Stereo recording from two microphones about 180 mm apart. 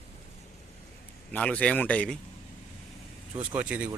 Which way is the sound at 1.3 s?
5° left (ahead or behind).